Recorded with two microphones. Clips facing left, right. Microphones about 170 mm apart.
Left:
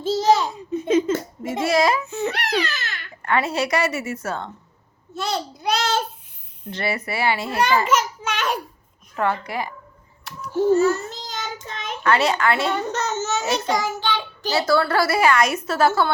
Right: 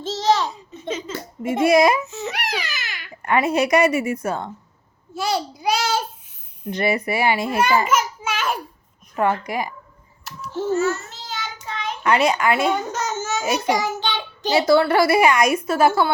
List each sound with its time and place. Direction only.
0.0 s a sound: 10° left (ahead or behind)
0.8 s speech: 55° left (ahead or behind)
1.6 s a child's voice: 15° right (ahead or behind)
2.0 s baby cry: 55° left (ahead or behind)
2.3 s babbling: 10° right (ahead or behind)
5.1 s a child's voice: 5° right (ahead or behind)
10.4 s a child's voice: 15° left (ahead or behind)
10.8 s child singing: 35° left (ahead or behind)
12.0 s a child's voice: 15° right (ahead or behind)